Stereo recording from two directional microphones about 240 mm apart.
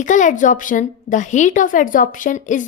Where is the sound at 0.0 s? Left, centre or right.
Left.